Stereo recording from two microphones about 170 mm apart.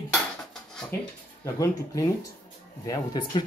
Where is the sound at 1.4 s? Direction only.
20° left (ahead or behind).